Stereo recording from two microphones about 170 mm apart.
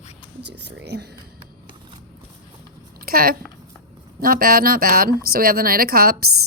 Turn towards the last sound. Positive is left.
turn(degrees=-60)  # may be behind; listen again after turning